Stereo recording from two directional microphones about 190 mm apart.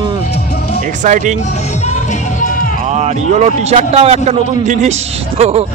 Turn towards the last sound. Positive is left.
turn(degrees=-30)  # may be behind; listen again after turning